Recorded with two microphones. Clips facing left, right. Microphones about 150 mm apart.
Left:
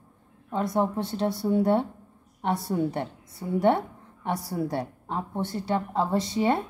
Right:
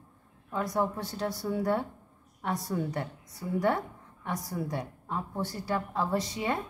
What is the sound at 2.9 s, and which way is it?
A woman's voice, 25° left (ahead or behind).